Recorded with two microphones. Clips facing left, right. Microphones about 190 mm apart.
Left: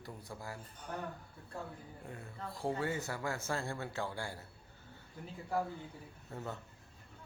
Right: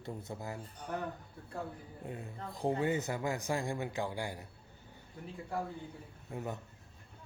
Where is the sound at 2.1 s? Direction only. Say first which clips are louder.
Right 3 dB; 20° right (ahead or behind).